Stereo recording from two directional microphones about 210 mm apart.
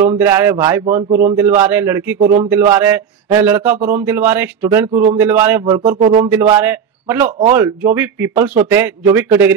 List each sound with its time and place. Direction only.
0.2 s speech: 10° right (ahead or behind)
5.9 s a sound: 30° right (ahead or behind)
6.3 s a man's voice: 10° right (ahead or behind)